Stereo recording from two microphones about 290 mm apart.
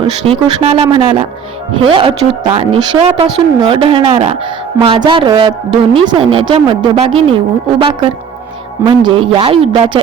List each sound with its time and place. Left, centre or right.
0.0 s a woman's voice: centre